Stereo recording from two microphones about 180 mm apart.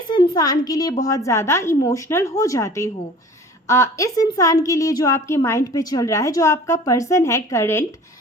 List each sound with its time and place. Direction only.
0.1 s a woman's voice: 20° left (ahead or behind)